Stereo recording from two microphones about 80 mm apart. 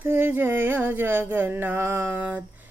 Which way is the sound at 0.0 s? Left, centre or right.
Right.